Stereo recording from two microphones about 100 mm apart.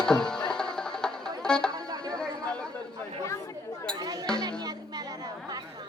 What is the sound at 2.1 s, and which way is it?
Chatter, 10° left (ahead or behind).